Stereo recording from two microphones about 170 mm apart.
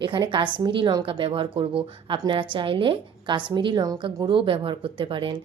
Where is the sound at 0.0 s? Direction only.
30° right (ahead or behind).